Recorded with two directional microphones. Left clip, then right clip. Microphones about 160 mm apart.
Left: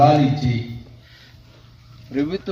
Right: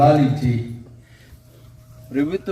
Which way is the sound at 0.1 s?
15° left (ahead or behind).